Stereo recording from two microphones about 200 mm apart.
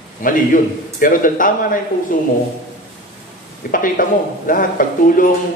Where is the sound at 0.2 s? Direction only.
45° left (ahead or behind).